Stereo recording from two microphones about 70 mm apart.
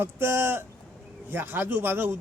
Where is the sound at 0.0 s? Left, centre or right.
Right.